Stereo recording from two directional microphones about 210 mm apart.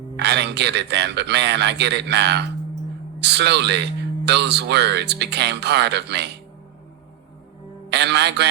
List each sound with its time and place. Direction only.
0.2 s speech: 55° right (ahead or behind)
7.9 s a man's voice: 55° right (ahead or behind)